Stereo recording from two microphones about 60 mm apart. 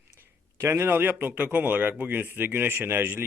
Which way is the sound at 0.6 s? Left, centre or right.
Right.